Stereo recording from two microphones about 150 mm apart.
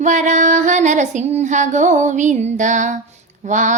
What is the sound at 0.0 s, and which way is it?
Female singing, 55° right (ahead or behind).